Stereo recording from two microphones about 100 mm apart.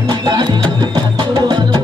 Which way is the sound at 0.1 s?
45° right (ahead or behind).